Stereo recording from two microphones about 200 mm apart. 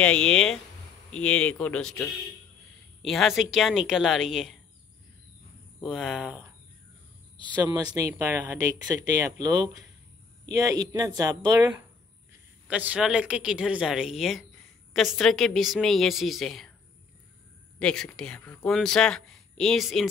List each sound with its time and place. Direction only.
0.0 s speech: 5° left (ahead or behind)
5.8 s speech: centre (ahead or behind)
7.6 s speech: 15° right (ahead or behind)
12.6 s speech: 5° right (ahead or behind)
17.7 s speech: 5° left (ahead or behind)